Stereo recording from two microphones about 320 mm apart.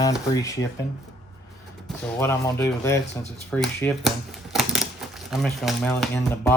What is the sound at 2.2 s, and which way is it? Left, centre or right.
Speech, centre.